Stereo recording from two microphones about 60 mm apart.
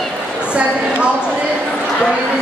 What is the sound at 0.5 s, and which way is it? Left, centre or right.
Speech, centre.